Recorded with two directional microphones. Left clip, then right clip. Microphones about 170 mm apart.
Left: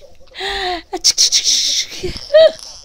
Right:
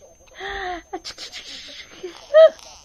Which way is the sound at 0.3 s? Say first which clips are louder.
Left 8 dB; 45° left (ahead or behind).